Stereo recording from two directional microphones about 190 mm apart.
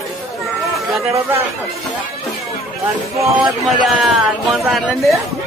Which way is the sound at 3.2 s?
25° right (ahead or behind).